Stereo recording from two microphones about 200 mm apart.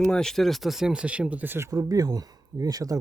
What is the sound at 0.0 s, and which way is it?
Speech, 5° left (ahead or behind).